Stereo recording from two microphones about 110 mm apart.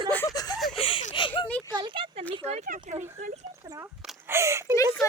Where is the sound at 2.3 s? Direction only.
70° right (ahead or behind).